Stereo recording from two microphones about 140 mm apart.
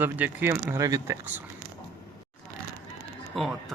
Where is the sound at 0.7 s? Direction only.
20° right (ahead or behind).